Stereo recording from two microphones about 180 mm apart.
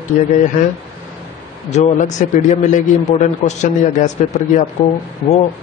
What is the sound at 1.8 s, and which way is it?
A man's voice, 45° left (ahead or behind).